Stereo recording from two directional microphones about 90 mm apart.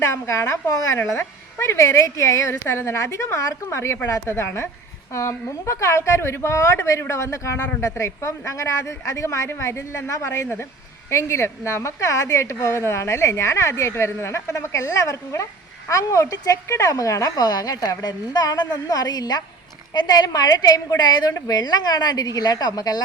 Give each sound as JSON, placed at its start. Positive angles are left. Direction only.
{"t": 0.0, "sound": "a woman's voice", "side_deg": 35}